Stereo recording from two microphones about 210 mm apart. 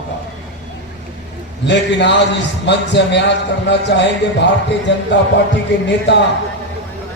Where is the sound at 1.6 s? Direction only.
55° left (ahead or behind).